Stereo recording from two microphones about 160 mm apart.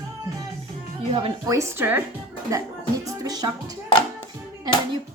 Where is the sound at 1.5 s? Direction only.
20° right (ahead or behind).